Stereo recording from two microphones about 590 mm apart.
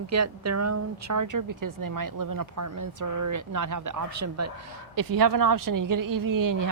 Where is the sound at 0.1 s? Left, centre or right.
Right.